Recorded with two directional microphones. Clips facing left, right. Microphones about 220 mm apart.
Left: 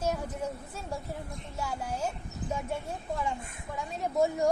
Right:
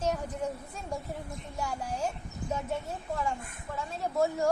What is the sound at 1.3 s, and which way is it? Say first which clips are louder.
Speech: right 1 dB; centre (ahead or behind).